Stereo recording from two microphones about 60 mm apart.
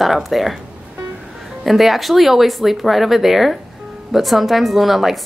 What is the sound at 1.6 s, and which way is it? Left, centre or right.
A woman's voice, centre.